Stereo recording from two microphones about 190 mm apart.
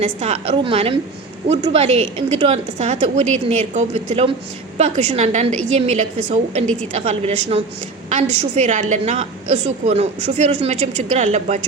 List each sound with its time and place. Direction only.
0.0 s a woman's voice: 35° right (ahead or behind)